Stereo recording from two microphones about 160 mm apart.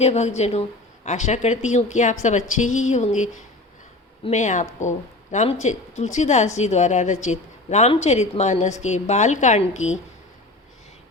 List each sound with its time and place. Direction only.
0.0 s a woman's voice: 45° left (ahead or behind)